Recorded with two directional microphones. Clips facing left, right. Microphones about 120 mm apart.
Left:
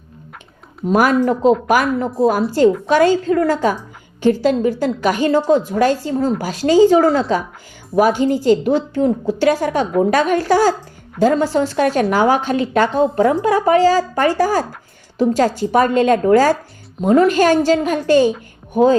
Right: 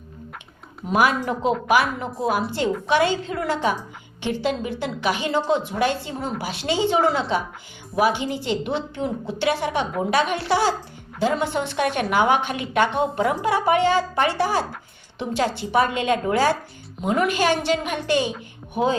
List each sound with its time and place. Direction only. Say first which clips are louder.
0.9 s a woman's voice: left 6 dB; 45° left (ahead or behind)